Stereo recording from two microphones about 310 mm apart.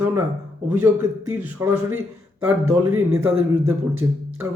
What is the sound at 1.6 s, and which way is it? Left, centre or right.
Speech, centre.